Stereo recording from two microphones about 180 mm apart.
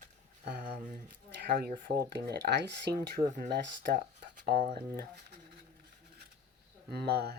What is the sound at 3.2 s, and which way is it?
Speech, 20° right (ahead or behind).